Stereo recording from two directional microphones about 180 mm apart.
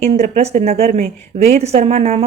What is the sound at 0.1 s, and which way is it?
Speech, 35° right (ahead or behind).